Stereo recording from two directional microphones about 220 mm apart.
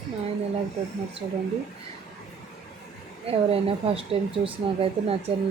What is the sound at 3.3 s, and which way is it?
Speech, 25° right (ahead or behind).